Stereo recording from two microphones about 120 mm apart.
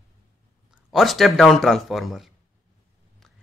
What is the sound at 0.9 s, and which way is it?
A man's voice, centre (ahead or behind).